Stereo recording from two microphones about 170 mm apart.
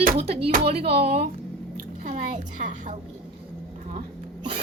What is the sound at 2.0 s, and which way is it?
Speech, 45° right (ahead or behind).